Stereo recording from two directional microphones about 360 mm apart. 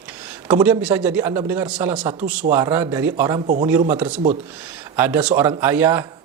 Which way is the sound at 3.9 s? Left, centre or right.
Centre.